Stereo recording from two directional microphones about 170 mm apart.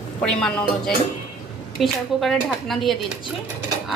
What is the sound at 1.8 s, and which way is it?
A woman's voice, centre (ahead or behind).